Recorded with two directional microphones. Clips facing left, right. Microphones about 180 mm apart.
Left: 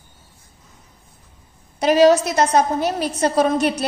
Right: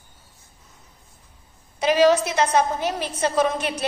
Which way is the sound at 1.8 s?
40° left (ahead or behind).